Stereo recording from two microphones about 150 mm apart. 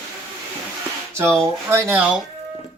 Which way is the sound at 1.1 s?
20° right (ahead or behind).